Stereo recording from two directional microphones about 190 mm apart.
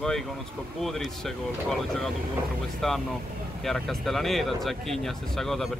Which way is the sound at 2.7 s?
Centre (ahead or behind).